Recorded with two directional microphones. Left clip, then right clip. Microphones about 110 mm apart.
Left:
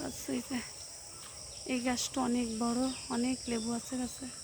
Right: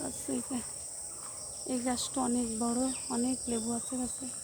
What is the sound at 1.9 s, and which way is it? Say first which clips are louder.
Speech: even; 30° left (ahead or behind).